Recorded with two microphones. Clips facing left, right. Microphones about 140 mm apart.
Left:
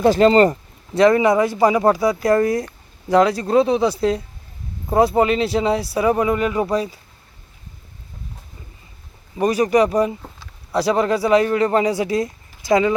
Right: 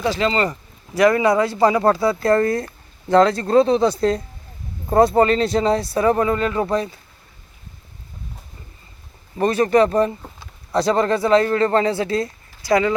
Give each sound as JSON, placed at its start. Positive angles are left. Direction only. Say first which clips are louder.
{"t": 0.0, "sound": "speech", "louder": "left 7 dB", "side_deg": 50}
{"t": 0.5, "sound": "speech", "louder": "left 3 dB", "side_deg": 25}
{"t": 9.4, "sound": "speech", "louder": "even", "side_deg": 10}